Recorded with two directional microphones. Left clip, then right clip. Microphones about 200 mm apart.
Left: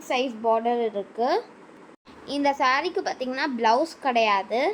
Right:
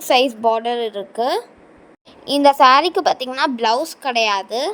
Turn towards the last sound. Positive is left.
turn(degrees=-40)  # may be behind; listen again after turning